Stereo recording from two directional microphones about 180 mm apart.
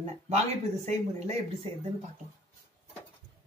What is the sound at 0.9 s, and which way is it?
Speech, 35° right (ahead or behind).